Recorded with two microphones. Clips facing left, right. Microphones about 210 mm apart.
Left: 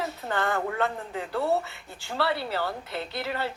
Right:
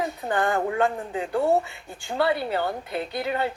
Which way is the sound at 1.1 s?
15° right (ahead or behind).